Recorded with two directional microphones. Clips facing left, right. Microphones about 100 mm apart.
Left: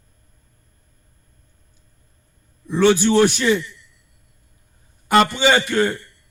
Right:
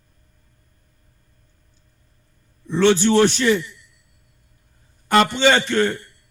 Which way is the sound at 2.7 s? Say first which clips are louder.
Left 1 dB; 10° left (ahead or behind).